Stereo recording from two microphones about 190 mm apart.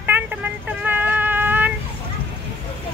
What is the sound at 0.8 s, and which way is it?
Cat, 10° right (ahead or behind).